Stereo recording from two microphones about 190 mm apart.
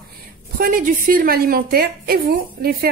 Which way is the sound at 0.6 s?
45° right (ahead or behind).